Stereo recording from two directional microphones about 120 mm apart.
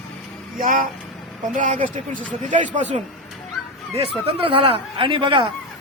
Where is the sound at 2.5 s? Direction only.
90° right.